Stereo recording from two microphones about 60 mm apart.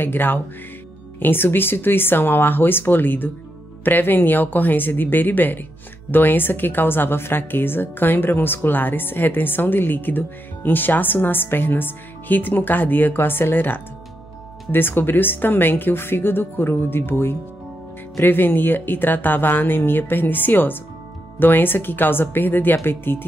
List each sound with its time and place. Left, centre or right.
0.0 s speech: left